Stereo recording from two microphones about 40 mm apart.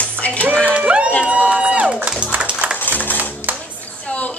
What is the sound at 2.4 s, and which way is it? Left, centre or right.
Music, right.